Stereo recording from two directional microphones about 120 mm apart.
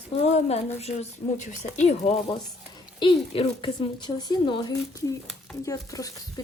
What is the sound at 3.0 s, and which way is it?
Speech, 40° left (ahead or behind).